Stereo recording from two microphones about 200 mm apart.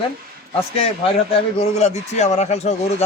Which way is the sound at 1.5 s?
30° left (ahead or behind).